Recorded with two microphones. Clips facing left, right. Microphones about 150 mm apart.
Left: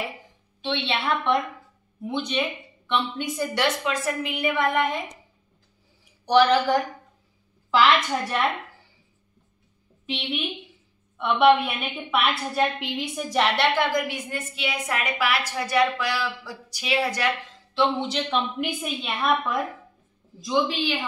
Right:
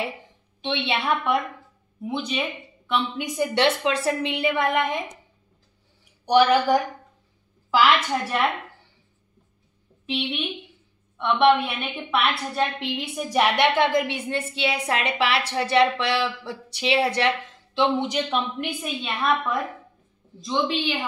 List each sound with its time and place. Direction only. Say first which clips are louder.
0.6 s a woman's voice: right 1 dB; 10° right (ahead or behind)
3.3 s a woman's voice: right 5 dB; 25° right (ahead or behind)
6.2 s a woman's voice: right 1 dB; 10° right (ahead or behind)
10.0 s a woman's voice: right 2 dB; centre (ahead or behind)
13.6 s a woman's voice: right 3 dB; 25° right (ahead or behind)
18.3 s a woman's voice: even; centre (ahead or behind)